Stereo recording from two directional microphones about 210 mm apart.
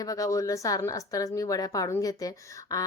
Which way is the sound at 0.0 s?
15° left (ahead or behind).